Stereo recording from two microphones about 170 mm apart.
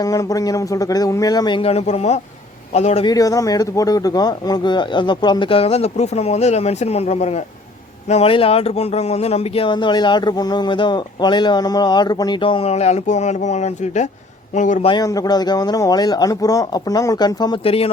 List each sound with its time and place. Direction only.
0.0 s speech: 20° left (ahead or behind); by 3.1 s 40° left (ahead or behind)
3.1 s a man's voice: 20° left (ahead or behind); by 14.8 s 45° left (ahead or behind)
14.8 s speech: 25° left (ahead or behind)